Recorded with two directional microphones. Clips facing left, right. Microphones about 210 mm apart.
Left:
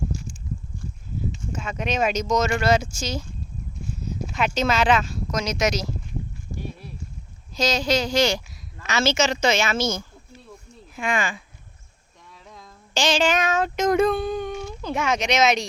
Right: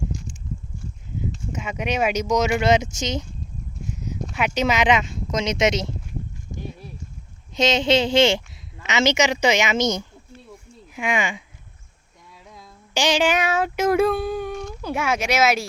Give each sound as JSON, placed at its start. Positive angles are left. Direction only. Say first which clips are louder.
{"t": 1.5, "sound": "speech", "louder": "right 1 dB", "side_deg": -15}
{"t": 3.9, "sound": "a sound", "louder": "left 2 dB", "side_deg": -15}
{"t": 4.3, "sound": "speech", "louder": "right 1 dB", "side_deg": -15}
{"t": 7.5, "sound": "speech", "louder": "right 3 dB", "side_deg": -25}
{"t": 12.5, "sound": "female singing", "louder": "even", "side_deg": -10}
{"t": 14.8, "sound": "speech", "louder": "even", "side_deg": -10}